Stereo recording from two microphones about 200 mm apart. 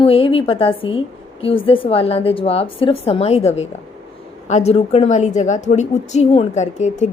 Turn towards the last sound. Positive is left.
turn(degrees=35)  # may be behind; listen again after turning